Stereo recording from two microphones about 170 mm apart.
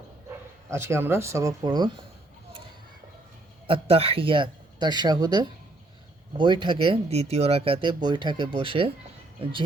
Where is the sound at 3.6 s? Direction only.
35° right (ahead or behind).